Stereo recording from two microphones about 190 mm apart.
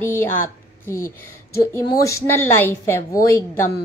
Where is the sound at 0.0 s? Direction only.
15° left (ahead or behind).